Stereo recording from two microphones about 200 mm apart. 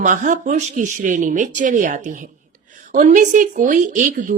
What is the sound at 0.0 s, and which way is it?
Speech, 40° right (ahead or behind).